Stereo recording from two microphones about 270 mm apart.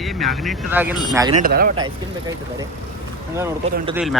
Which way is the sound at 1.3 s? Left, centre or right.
Right.